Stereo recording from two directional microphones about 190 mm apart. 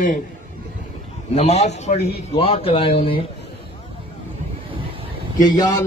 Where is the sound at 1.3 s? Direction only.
35° left (ahead or behind).